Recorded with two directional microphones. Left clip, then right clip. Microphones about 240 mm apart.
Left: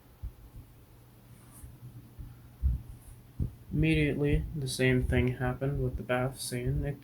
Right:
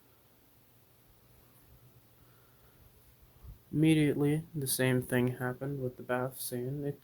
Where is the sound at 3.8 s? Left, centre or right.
Right.